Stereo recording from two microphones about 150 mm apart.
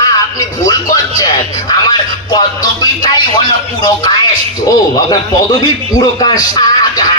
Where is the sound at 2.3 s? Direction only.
25° left (ahead or behind).